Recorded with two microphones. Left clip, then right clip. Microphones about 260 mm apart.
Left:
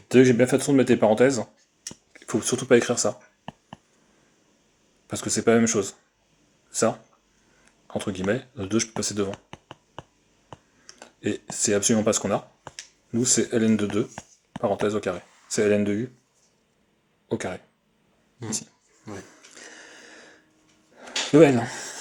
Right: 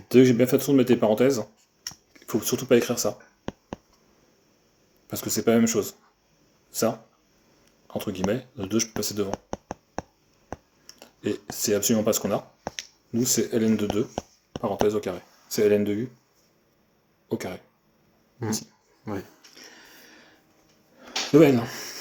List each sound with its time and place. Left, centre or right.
0.1 s speech: left
5.0 s speech: left
10.8 s speech: left
17.2 s speech: left
19.5 s a sound: left
21.0 s drawer open or close: left
21.3 s speech: left